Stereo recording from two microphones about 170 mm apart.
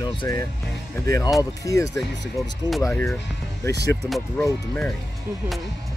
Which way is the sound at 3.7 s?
80° right.